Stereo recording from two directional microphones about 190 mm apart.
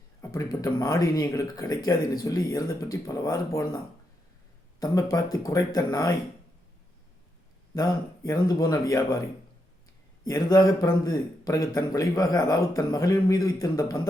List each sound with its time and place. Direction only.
0.2 s speech: 20° left (ahead or behind)
5.1 s speech: 20° left (ahead or behind)
7.8 s speech: 20° left (ahead or behind)
10.2 s speech: 20° left (ahead or behind)